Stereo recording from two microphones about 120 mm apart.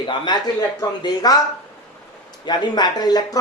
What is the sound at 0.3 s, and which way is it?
Speech, 35° left (ahead or behind).